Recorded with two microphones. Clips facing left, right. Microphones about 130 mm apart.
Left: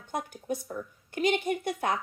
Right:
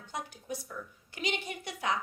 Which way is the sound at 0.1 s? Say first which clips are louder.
Left 6 dB; 50° left (ahead or behind).